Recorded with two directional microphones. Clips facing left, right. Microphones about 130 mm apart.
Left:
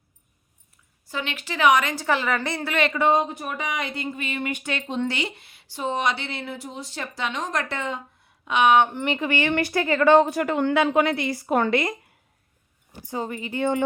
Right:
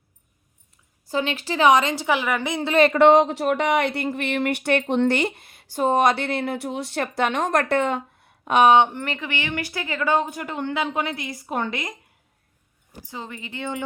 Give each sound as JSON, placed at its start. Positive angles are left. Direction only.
{"t": 1.1, "sound": "speech", "side_deg": -35}
{"t": 2.0, "sound": "a woman's voice", "side_deg": -10}
{"t": 2.9, "sound": "speech", "side_deg": -80}
{"t": 9.0, "sound": "speech", "side_deg": 20}
{"t": 9.2, "sound": "a woman's voice", "side_deg": 45}
{"t": 13.1, "sound": "speech", "side_deg": 40}